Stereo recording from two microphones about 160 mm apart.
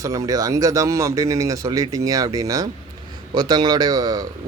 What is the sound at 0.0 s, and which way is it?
A man's voice, 20° right (ahead or behind).